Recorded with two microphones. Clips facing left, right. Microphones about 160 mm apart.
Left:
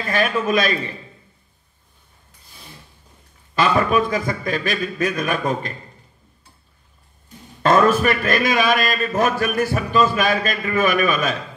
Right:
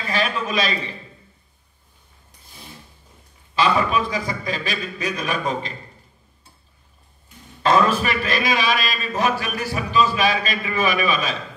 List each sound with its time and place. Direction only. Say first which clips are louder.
0.0 s a man's voice: left 4 dB; 50° left (ahead or behind)
3.5 s a man's voice: left 2 dB; 50° left (ahead or behind)
7.2 s a man's voice: left 2 dB; 50° left (ahead or behind)